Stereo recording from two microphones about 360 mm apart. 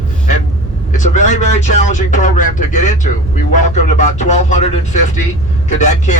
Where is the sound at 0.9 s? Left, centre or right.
Centre.